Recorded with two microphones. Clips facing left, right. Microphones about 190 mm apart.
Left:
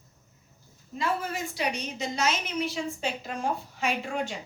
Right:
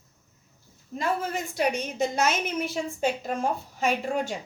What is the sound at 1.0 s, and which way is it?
A woman's voice, 45° right (ahead or behind).